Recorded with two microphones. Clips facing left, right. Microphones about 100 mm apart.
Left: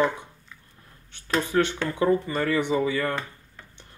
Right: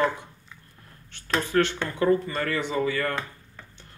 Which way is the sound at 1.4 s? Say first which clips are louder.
Right 1 dB; 15° left (ahead or behind).